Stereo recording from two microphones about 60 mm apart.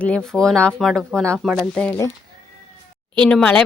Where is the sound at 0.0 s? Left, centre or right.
Centre.